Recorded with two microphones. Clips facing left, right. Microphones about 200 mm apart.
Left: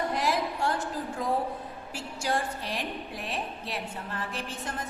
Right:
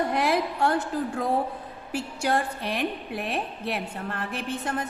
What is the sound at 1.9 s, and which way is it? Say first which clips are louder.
A woman's voice: right 5 dB; 60° right (ahead or behind).